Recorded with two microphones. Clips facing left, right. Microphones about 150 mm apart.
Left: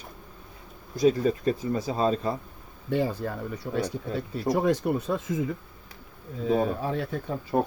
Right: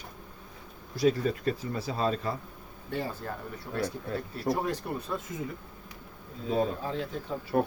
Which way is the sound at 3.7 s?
15° left (ahead or behind).